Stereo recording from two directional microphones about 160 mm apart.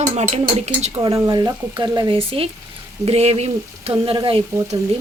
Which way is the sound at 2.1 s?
35° right (ahead or behind).